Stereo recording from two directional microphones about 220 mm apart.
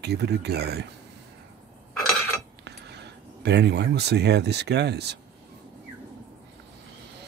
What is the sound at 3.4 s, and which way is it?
Speech, 50° right (ahead or behind).